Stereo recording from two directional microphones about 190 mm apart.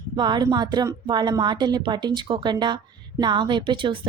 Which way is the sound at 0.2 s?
20° right (ahead or behind).